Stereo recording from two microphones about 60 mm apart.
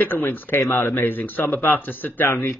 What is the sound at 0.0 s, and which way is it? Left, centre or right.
A man's voice, left.